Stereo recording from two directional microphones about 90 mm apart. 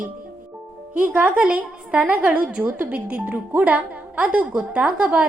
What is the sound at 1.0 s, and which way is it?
A woman's voice, 20° right (ahead or behind).